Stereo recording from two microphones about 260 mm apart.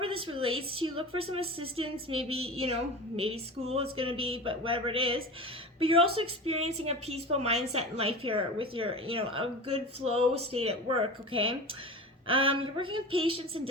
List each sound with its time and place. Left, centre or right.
0.3 s a woman's voice: right